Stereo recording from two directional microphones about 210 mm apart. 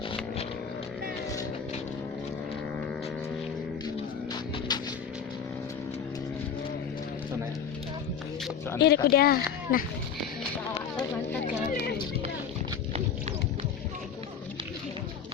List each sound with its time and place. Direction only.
4.7 s music: 20° left (ahead or behind)
8.8 s speech: 50° left (ahead or behind)